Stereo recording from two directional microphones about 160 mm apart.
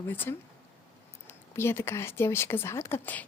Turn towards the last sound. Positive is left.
turn(degrees=10)  # may be behind; listen again after turning